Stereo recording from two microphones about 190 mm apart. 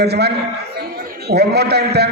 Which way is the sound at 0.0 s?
60° right (ahead or behind).